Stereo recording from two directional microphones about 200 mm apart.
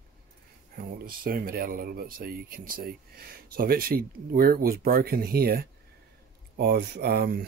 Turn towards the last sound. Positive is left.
turn(degrees=-50)  # may be behind; listen again after turning